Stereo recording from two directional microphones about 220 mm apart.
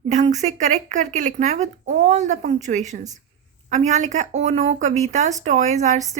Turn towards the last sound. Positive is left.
turn(degrees=-30)  # may be behind; listen again after turning